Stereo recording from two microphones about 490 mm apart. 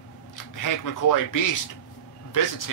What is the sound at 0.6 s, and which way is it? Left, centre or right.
Speech, left.